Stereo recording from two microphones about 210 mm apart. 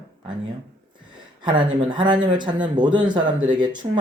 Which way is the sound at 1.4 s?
20° right (ahead or behind).